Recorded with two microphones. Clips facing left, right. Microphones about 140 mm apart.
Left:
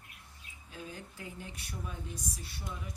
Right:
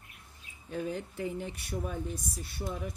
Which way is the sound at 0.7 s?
60° right (ahead or behind).